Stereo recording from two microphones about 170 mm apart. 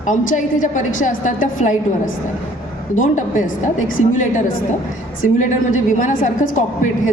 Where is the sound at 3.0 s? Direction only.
50° left (ahead or behind).